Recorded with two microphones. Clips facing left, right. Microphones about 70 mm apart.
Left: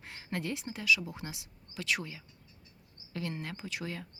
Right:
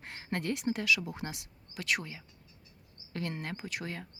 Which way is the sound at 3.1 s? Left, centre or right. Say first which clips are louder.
Right 1 dB; right.